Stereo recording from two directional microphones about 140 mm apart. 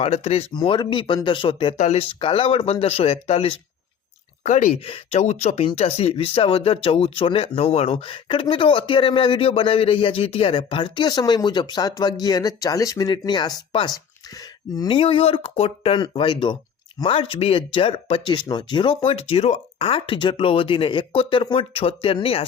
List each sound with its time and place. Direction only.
0.0 s speech: 45° left (ahead or behind)
0.5 s speech: 35° left (ahead or behind)
1.8 s speech: 50° left (ahead or behind)
4.4 s speech: 55° left (ahead or behind)